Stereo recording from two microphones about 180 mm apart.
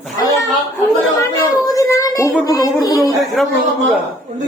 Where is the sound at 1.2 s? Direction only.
20° left (ahead or behind).